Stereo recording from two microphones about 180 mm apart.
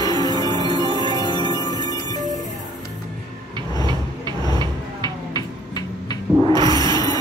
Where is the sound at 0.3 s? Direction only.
20° right (ahead or behind).